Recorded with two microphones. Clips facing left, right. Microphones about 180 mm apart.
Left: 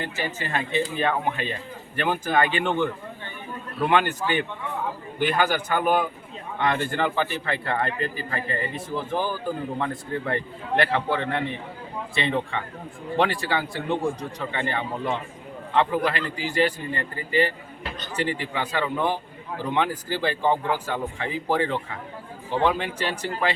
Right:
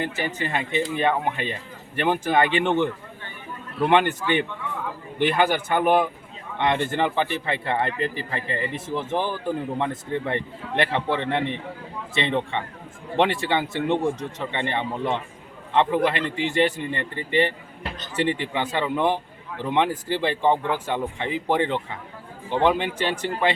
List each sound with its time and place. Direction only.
0.0 s speech: 20° right (ahead or behind)